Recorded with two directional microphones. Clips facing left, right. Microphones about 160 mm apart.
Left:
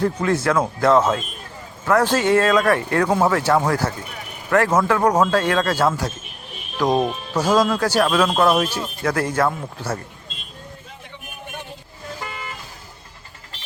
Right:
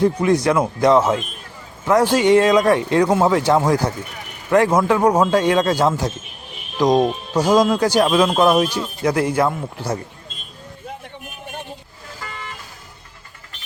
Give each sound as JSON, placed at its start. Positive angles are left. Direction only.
{"t": 0.0, "sound": "speech", "side_deg": -15}